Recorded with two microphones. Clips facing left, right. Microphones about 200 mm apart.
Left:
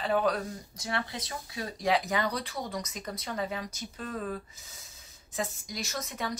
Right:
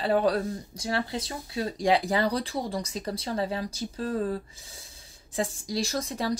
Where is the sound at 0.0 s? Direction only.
35° right (ahead or behind).